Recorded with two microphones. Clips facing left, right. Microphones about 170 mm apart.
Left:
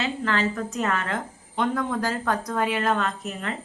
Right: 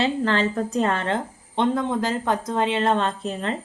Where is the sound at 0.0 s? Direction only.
30° right (ahead or behind).